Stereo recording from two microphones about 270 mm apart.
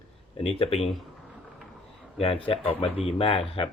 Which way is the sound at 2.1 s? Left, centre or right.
Left.